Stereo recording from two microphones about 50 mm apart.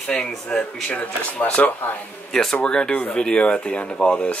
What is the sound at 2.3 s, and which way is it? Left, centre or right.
Speech, centre.